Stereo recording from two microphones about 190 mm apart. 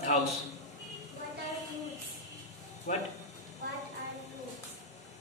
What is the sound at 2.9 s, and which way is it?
Speech, 40° left (ahead or behind).